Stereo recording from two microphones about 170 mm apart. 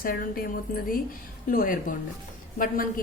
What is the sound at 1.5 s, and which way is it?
A woman's voice, 55° left (ahead or behind).